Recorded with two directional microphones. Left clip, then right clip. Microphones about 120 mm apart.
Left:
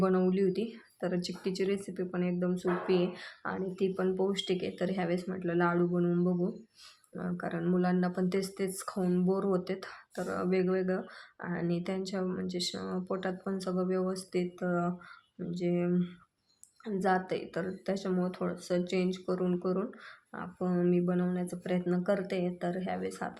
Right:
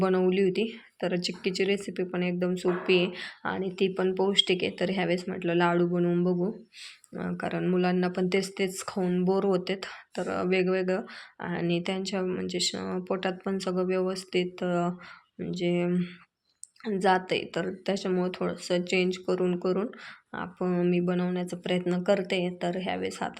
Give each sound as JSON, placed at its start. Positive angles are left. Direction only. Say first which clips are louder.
{"t": 0.0, "sound": "speech", "louder": "right 4 dB", "side_deg": -25}